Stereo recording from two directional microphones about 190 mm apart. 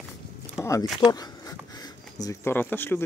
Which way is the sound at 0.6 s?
10° left (ahead or behind).